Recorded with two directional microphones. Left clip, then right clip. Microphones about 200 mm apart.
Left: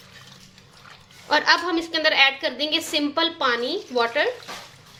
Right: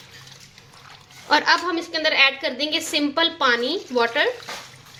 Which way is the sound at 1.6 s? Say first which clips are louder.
Left 1 dB; 10° left (ahead or behind).